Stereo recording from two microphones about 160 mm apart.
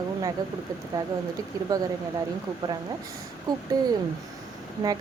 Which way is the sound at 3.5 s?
25° right (ahead or behind).